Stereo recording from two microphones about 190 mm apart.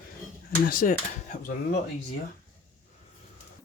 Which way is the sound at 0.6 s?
45° left (ahead or behind).